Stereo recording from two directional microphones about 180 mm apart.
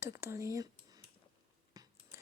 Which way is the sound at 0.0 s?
15° right (ahead or behind).